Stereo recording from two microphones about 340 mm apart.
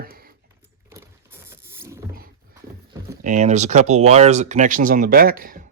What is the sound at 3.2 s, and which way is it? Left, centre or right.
Speech, right.